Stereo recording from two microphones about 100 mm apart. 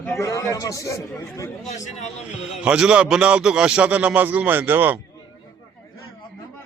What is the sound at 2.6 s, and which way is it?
A man's voice, 10° right (ahead or behind).